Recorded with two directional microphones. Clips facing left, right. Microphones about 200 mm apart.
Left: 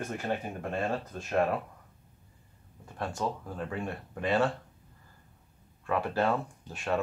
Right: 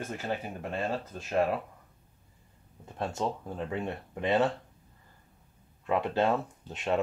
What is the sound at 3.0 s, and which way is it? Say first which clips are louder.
Speech: right 1 dB; 25° right (ahead or behind).